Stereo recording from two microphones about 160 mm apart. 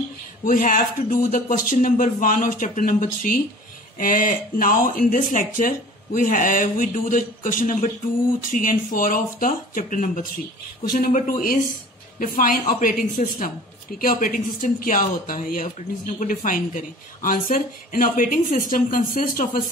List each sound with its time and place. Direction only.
0.5 s speech: 60° left (ahead or behind)